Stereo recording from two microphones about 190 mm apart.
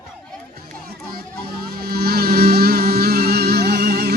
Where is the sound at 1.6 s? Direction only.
55° right (ahead or behind).